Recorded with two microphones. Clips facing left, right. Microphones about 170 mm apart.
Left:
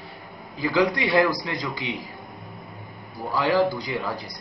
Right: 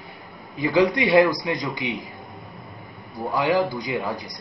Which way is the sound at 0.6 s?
20° right (ahead or behind).